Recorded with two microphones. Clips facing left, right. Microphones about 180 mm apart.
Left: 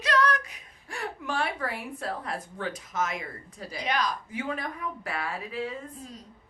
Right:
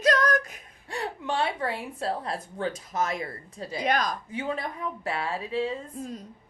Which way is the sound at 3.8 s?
45° right (ahead or behind).